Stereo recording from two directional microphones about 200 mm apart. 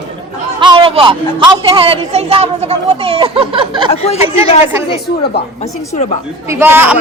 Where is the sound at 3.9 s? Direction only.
30° left (ahead or behind).